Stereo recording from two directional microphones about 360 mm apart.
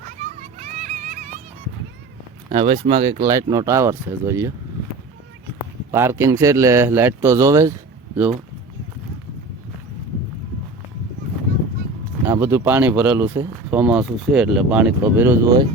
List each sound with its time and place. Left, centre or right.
0.6 s a sound: centre
2.5 s speech: centre
5.9 s speech: centre
12.2 s speech: centre